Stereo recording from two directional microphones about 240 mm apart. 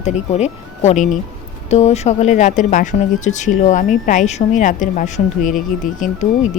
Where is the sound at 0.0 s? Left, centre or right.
Left.